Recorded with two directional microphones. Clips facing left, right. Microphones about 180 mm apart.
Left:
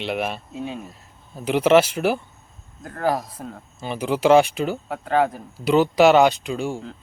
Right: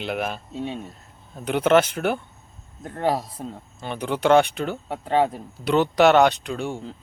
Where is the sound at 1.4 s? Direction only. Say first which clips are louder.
Left 2 dB; 5° left (ahead or behind).